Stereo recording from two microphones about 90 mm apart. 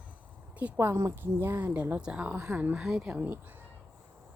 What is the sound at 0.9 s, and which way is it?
A woman's voice, 30° right (ahead or behind).